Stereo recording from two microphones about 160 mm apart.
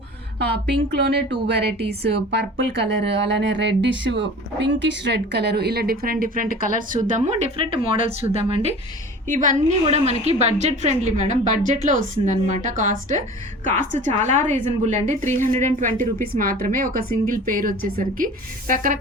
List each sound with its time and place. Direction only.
0.3 s a woman's voice: 90° right; by 7.9 s 35° right (ahead or behind)
7.9 s a woman's voice: 50° left (ahead or behind)
8.4 s a woman's voice: 35° right (ahead or behind)
9.3 s a woman's voice: 50° right (ahead or behind)
16.2 s a woman's voice: 65° right (ahead or behind)